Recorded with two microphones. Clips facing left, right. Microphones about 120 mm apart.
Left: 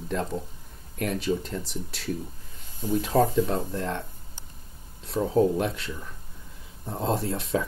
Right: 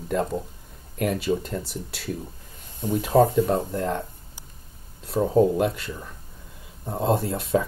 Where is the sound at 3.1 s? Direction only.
15° right (ahead or behind).